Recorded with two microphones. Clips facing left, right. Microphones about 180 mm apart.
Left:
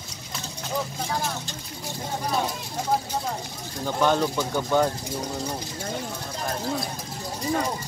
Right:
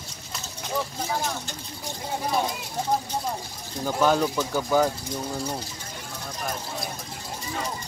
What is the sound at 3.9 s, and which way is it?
Speech, 5° right (ahead or behind).